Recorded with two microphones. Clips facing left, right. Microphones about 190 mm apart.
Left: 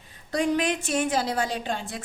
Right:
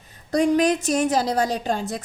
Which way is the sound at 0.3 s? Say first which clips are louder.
Right 6 dB; 45° right (ahead or behind).